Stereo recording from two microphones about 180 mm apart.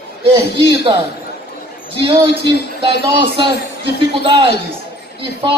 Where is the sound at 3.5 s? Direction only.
70° left (ahead or behind).